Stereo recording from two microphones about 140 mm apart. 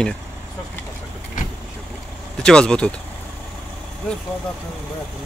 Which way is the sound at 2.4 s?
5° left (ahead or behind).